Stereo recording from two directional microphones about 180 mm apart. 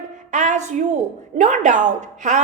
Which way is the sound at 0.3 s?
40° right (ahead or behind).